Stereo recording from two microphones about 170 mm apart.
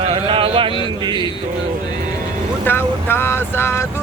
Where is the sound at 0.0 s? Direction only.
35° right (ahead or behind).